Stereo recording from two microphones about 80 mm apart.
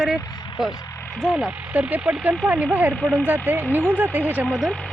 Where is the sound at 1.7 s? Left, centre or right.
Centre.